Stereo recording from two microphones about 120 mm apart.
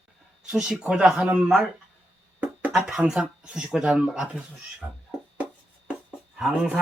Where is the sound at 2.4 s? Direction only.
15° right (ahead or behind).